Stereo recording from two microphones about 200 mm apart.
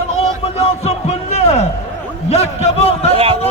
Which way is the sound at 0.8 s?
30° left (ahead or behind).